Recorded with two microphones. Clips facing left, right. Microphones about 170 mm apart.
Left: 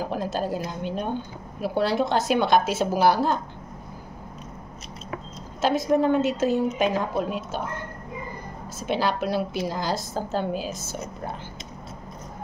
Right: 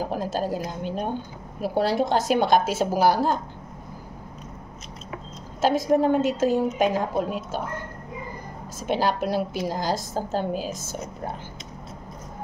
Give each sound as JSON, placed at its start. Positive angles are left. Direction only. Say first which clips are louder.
{"t": 0.0, "sound": "a woman's voice", "louder": "right 1 dB", "side_deg": -40}
{"t": 5.9, "sound": "a woman's voice", "louder": "even", "side_deg": -45}
{"t": 8.8, "sound": "a woman's voice", "louder": "right 1 dB", "side_deg": -45}